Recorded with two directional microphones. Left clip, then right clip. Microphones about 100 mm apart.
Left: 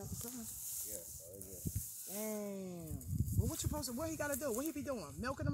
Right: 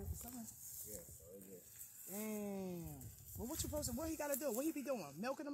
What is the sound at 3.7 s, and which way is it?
Speech, 20° right (ahead or behind).